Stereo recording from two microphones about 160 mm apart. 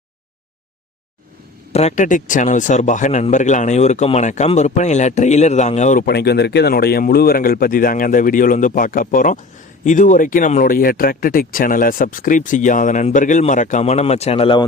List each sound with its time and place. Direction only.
1.7 s speech: 45° left (ahead or behind)
6.1 s speech: 90° left; by 14.6 s 35° left (ahead or behind)